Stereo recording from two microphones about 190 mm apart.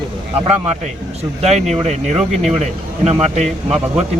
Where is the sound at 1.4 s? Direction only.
35° right (ahead or behind).